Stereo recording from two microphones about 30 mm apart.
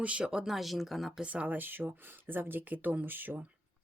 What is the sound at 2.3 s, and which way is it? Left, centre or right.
Speech, right.